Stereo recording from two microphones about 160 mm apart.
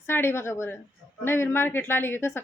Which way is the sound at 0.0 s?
15° left (ahead or behind).